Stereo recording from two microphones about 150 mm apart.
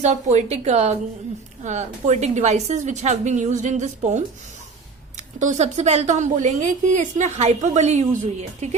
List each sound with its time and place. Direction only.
0.0 s a woman's voice: 50° right (ahead or behind)